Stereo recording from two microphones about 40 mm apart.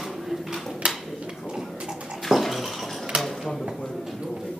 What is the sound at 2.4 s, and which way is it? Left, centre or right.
Bathtub, centre.